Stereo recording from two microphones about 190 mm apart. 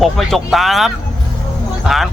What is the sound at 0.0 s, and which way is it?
Speech, centre (ahead or behind).